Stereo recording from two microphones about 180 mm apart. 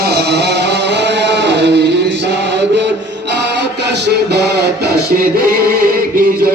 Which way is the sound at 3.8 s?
65° right (ahead or behind).